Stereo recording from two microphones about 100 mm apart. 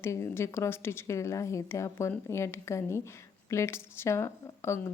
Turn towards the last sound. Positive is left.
turn(degrees=25)  # may be behind; listen again after turning